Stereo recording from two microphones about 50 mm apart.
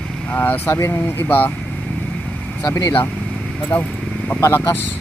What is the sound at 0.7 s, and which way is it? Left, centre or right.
Speech, left.